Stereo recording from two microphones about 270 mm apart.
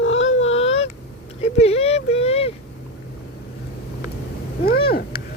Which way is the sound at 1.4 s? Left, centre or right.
Left.